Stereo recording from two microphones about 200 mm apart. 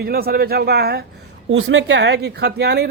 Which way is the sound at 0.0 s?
50° right (ahead or behind).